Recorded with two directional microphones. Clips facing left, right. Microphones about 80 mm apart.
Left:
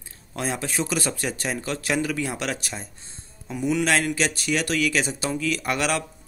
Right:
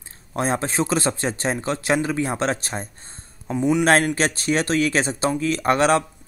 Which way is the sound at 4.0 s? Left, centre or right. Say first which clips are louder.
Right 3 dB; right.